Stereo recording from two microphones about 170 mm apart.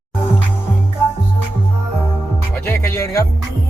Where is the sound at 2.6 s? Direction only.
15° left (ahead or behind).